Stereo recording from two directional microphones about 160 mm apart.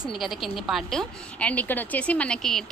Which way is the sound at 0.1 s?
Centre (ahead or behind).